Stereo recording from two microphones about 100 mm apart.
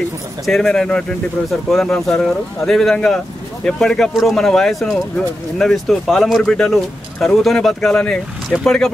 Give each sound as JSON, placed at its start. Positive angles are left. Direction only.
{"t": 0.5, "sound": "speech", "side_deg": 5}